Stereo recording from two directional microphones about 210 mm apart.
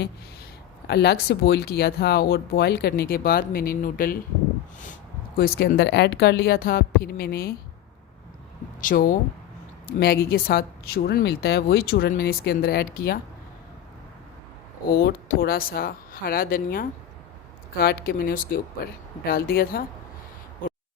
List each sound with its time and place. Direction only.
0.9 s speech: 50° left (ahead or behind)
5.4 s speech: 45° left (ahead or behind)
8.8 s speech: 40° left (ahead or behind)
14.9 s speech: 45° left (ahead or behind)